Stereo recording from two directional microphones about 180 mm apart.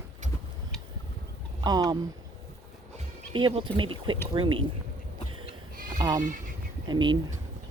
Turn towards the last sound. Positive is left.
turn(degrees=-25)  # may be behind; listen again after turning